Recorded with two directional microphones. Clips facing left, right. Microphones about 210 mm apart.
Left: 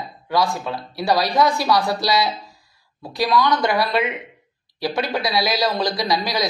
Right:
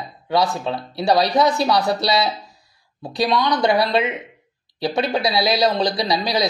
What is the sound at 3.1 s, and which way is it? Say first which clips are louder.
A man's voice: even; 25° right (ahead or behind).